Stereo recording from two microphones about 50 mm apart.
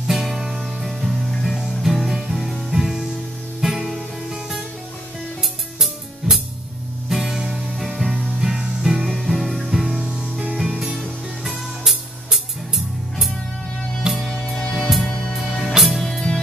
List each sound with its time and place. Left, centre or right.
0.0 s music: centre
14.0 s music: centre
14.3 s music: centre
14.9 s music: centre